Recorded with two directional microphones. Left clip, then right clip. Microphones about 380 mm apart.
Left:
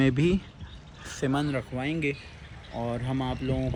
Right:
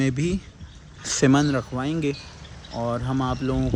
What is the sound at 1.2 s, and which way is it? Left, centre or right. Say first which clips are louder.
Speech: right 8 dB; right.